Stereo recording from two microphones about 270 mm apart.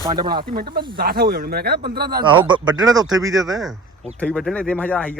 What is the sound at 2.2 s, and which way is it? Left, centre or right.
Speech, centre.